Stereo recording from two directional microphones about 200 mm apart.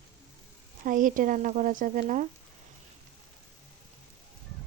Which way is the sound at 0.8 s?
40° right (ahead or behind).